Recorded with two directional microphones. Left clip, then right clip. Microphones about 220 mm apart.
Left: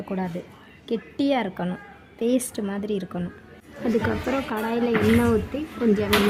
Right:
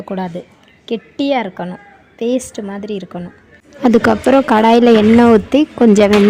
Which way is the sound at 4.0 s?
45° right (ahead or behind).